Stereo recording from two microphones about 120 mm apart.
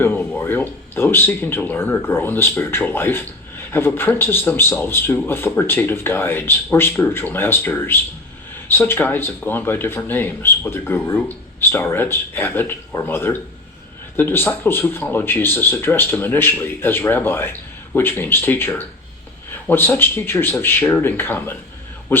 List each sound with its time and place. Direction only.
0.0 s a man's voice: 15° left (ahead or behind)